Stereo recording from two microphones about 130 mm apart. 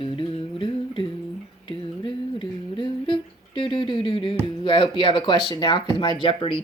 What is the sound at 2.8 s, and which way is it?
Humming, 40° left (ahead or behind).